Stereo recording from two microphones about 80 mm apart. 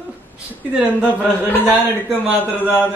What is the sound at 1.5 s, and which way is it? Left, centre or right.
Speech, left.